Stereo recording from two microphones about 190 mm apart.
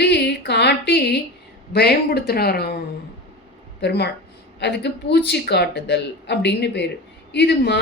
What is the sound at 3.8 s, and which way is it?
Speech, 60° left (ahead or behind).